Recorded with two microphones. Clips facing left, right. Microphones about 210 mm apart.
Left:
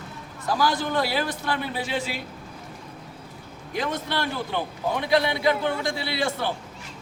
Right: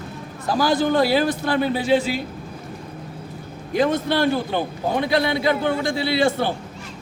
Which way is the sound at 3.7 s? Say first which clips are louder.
Right 8 dB; 30° right (ahead or behind).